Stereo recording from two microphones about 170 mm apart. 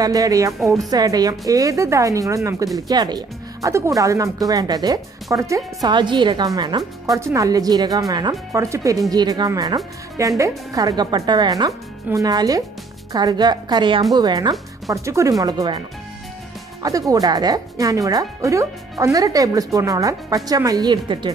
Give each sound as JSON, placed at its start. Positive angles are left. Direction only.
{"t": 0.0, "sound": "speech", "side_deg": -20}
{"t": 16.8, "sound": "speech", "side_deg": -20}